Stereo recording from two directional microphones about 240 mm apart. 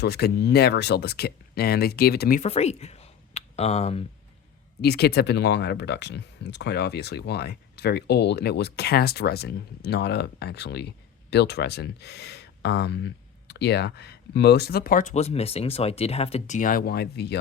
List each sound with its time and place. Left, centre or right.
0.0 s speech: left
4.8 s speech: left